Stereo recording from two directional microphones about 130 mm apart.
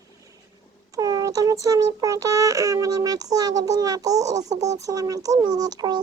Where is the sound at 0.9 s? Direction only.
25° right (ahead or behind).